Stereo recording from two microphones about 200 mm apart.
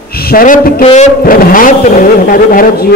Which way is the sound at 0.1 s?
50° left (ahead or behind).